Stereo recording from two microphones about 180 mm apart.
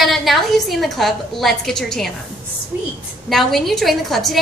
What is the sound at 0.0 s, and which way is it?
A woman's voice, centre (ahead or behind).